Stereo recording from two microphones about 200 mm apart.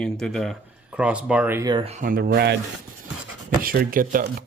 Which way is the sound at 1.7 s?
30° right (ahead or behind).